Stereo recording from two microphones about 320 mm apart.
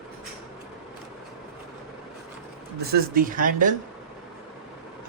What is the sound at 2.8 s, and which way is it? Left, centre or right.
Speech, right.